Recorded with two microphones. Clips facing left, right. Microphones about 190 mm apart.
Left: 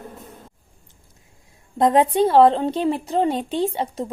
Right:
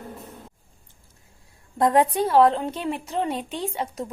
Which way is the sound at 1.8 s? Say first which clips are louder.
Left 3 dB; 20° left (ahead or behind).